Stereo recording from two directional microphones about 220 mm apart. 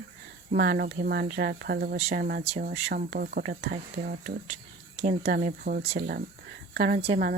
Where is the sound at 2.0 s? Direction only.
30° right (ahead or behind).